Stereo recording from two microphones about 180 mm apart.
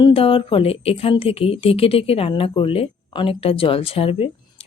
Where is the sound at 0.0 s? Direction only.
30° left (ahead or behind).